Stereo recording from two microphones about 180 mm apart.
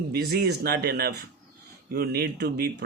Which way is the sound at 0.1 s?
60° right (ahead or behind).